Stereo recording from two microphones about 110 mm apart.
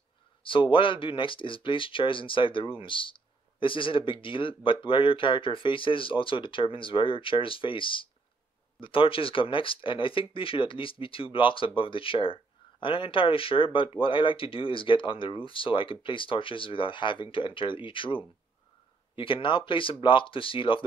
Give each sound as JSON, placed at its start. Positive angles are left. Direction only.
{"t": 0.4, "sound": "speech", "side_deg": 50}